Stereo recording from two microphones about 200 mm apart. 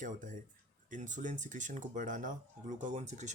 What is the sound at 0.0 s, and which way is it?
Speech, 40° right (ahead or behind).